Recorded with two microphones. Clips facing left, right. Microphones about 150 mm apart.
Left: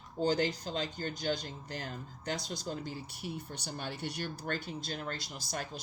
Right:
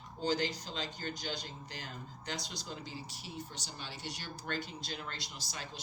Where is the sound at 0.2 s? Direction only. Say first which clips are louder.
Left 4 dB; 50° left (ahead or behind).